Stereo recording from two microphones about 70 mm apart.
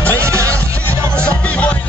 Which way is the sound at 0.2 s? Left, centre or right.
Right.